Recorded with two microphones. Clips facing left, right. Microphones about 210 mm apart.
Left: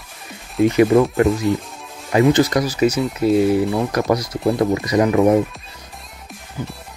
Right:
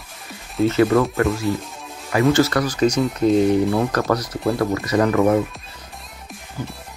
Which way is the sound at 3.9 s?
15° left (ahead or behind).